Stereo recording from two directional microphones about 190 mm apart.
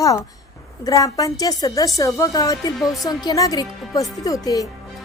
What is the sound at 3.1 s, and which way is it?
A woman's voice, 20° left (ahead or behind).